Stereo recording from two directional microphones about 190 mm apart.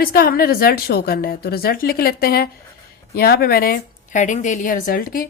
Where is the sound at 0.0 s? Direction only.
50° left (ahead or behind).